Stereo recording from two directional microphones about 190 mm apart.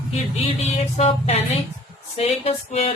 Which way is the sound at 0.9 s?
35° left (ahead or behind).